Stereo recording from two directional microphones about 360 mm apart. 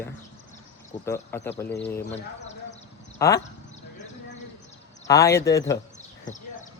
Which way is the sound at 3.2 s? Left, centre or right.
Centre.